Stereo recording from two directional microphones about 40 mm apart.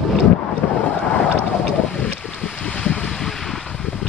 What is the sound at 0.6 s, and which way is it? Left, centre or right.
Boat, left.